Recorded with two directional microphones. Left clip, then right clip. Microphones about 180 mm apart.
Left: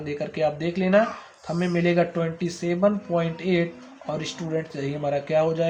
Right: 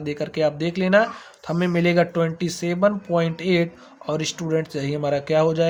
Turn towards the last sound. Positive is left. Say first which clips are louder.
# right 3 dB
turn(degrees=-65)  # may be behind; listen again after turning